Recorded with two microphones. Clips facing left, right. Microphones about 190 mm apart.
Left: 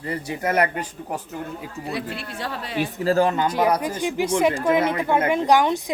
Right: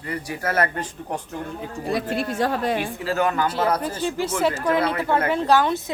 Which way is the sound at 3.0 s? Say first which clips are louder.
Left 6 dB; 35° left (ahead or behind).